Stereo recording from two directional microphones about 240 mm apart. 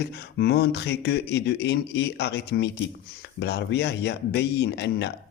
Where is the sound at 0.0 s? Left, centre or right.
Left.